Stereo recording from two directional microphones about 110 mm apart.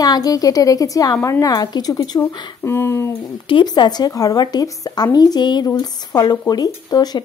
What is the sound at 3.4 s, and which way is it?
Speech, 45° left (ahead or behind).